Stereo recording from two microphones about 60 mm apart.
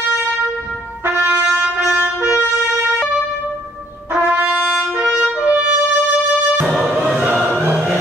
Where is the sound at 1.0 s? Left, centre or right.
Right.